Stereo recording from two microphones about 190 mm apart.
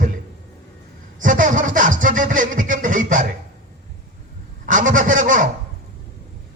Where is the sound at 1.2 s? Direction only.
45° right (ahead or behind).